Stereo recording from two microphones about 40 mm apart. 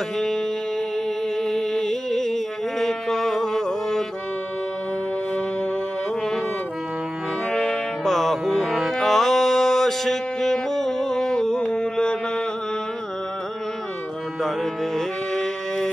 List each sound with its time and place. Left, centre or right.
1.4 s music: centre
7.5 s music: left
8.0 s music: centre; by 12.2 s left
14.4 s music: centre